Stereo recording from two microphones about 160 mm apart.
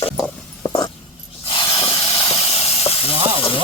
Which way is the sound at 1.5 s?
30° left (ahead or behind).